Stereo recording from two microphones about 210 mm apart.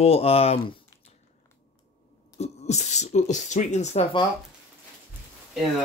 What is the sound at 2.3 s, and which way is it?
Speech, 30° left (ahead or behind).